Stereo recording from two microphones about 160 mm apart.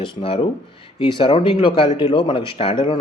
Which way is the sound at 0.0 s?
35° left (ahead or behind).